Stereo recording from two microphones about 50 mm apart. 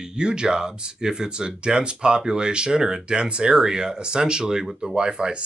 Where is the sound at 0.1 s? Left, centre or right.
Centre.